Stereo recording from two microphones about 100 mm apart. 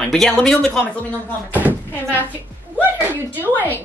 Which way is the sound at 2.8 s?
20° right (ahead or behind).